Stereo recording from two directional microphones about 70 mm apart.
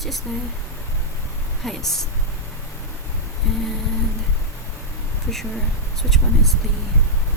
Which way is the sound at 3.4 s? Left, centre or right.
Centre.